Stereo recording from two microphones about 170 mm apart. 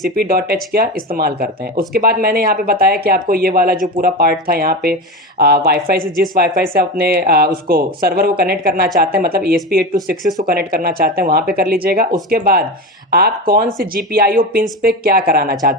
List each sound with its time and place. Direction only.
0.2 s speech: 65° right (ahead or behind)